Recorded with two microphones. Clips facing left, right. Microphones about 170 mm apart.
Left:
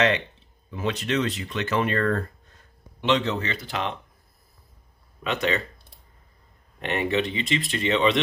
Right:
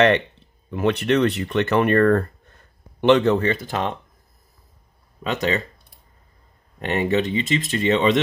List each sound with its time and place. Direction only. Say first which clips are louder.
0.7 s speech: right 7 dB; 60° right (ahead or behind)
5.2 s speech: right 3 dB; 40° right (ahead or behind)
6.8 s speech: right 4 dB; 40° right (ahead or behind)